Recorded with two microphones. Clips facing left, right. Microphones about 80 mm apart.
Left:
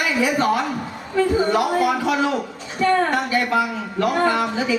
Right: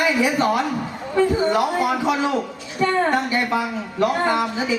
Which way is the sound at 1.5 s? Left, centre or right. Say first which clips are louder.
Left 1 dB; right.